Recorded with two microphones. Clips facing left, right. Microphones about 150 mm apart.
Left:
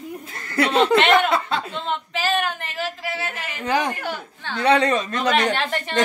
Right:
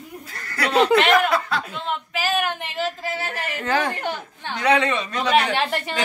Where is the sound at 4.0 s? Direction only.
20° right (ahead or behind).